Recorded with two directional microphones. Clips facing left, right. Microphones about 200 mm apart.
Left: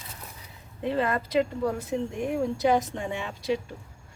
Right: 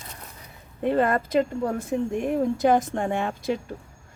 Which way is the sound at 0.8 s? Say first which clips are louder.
Right 5 dB; 50° right (ahead or behind).